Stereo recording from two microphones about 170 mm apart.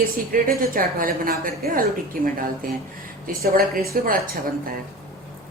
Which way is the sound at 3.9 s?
55° right (ahead or behind).